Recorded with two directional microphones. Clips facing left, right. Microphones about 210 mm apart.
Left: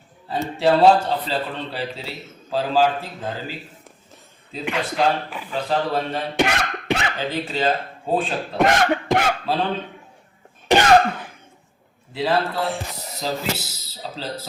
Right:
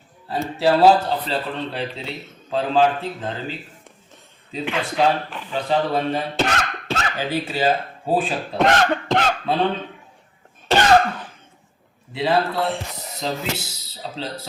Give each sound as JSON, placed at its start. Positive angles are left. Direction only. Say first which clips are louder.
{"t": 0.3, "sound": "a man's voice", "louder": "even", "side_deg": 0}
{"t": 4.5, "sound": "a man's voice", "louder": "right 1 dB", "side_deg": 0}
{"t": 6.3, "sound": "a sound", "louder": "left 1 dB", "side_deg": 15}
{"t": 7.2, "sound": "speech", "louder": "right 1 dB", "side_deg": -10}
{"t": 8.5, "sound": "cough", "louder": "even", "side_deg": 10}
{"t": 10.7, "sound": "cough", "louder": "left 1 dB", "side_deg": 10}
{"t": 12.1, "sound": "a man's voice", "louder": "right 1 dB", "side_deg": 0}